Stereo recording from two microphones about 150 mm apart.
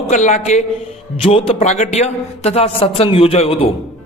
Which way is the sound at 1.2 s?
40° left (ahead or behind).